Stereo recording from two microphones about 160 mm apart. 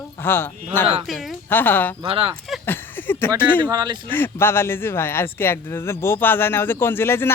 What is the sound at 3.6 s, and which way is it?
Speech, 25° right (ahead or behind).